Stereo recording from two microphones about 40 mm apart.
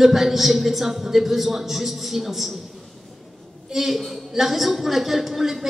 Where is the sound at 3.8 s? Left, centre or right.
Centre.